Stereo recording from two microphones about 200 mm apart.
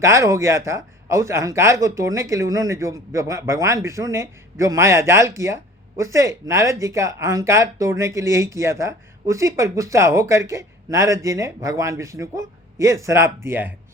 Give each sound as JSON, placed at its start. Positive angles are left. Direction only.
{"t": 0.0, "sound": "speech", "side_deg": -15}